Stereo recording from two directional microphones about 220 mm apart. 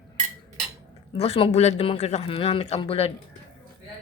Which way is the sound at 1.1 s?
25° left (ahead or behind).